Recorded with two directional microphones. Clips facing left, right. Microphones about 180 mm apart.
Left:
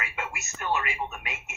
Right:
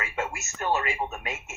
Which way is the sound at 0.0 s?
40° right (ahead or behind).